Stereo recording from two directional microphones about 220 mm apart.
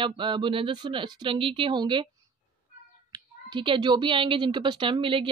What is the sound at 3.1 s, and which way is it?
A woman's voice, 20° right (ahead or behind).